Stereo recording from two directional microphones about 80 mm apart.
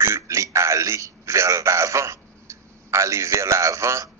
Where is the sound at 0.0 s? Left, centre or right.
Right.